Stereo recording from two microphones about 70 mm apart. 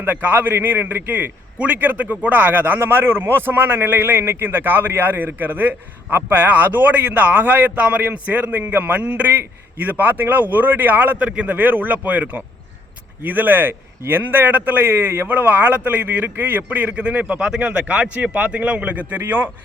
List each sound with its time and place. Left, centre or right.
0.0 s a man's voice: right